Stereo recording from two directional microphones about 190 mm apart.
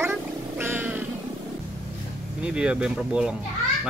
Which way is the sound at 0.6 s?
10° right (ahead or behind).